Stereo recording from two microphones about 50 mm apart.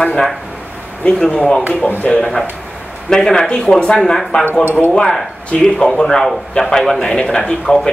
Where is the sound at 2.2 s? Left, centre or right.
Centre.